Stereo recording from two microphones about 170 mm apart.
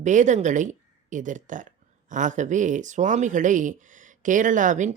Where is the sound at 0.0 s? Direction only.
45° right (ahead or behind).